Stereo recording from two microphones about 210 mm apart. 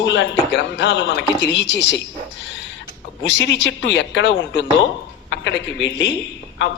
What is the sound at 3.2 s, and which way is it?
A man's voice, 60° left (ahead or behind).